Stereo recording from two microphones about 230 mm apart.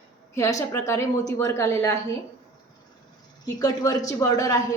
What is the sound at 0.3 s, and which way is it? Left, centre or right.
A woman's voice, centre.